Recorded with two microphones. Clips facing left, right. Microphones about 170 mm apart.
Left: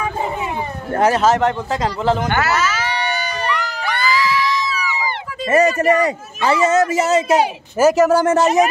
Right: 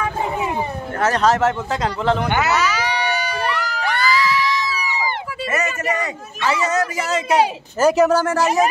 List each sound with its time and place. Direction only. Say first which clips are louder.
1.0 s speech: left 2 dB; 5° left (ahead or behind)
2.2 s a sound: even; 15° right (ahead or behind)
5.5 s speech: left 9 dB; 35° left (ahead or behind)
7.7 s speech: left 2 dB; 5° left (ahead or behind)
8.2 s speech: left 4 dB; 20° left (ahead or behind)